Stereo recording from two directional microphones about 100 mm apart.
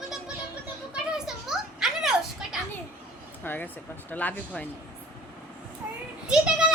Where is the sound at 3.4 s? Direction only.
20° left (ahead or behind).